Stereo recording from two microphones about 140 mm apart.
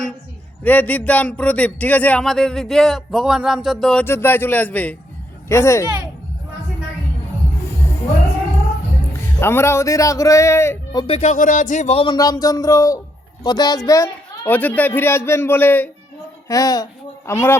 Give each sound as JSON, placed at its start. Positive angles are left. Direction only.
{"t": 0.6, "sound": "speech", "side_deg": 10}
{"t": 4.0, "sound": "a man's voice", "side_deg": 15}
{"t": 9.4, "sound": "a man's voice", "side_deg": 20}
{"t": 10.9, "sound": "speech", "side_deg": 40}
{"t": 11.2, "sound": "speech", "side_deg": 65}
{"t": 12.0, "sound": "a man's voice", "side_deg": 25}
{"t": 14.4, "sound": "a man's voice", "side_deg": 10}
{"t": 16.5, "sound": "speech", "side_deg": 25}